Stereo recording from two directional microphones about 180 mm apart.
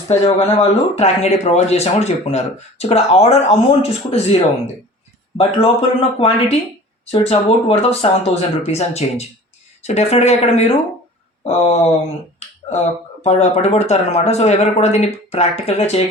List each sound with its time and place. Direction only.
0.1 s speech: 35° left (ahead or behind)
13.2 s speech: 35° left (ahead or behind)